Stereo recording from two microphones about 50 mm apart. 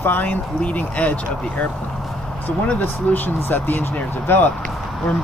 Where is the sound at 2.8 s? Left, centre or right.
Left.